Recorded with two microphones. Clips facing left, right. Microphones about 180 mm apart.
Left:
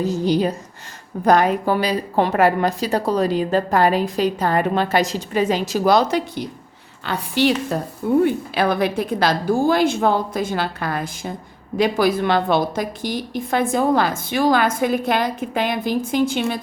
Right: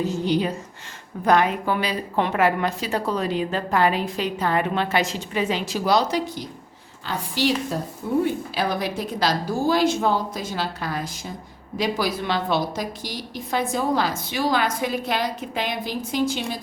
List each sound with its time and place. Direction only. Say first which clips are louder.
0.0 s a woman's voice: left 4 dB; 40° left (ahead or behind); by 16.6 s 60° left (ahead or behind)